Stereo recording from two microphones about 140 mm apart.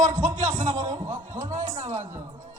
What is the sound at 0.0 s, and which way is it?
Speech, 70° right (ahead or behind).